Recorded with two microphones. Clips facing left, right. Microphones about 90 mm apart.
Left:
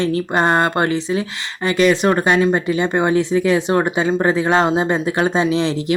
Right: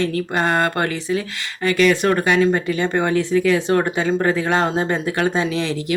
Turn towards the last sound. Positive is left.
turn(degrees=25)  # may be behind; listen again after turning